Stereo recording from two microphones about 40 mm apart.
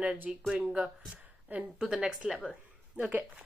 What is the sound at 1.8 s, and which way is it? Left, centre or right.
Speech, right.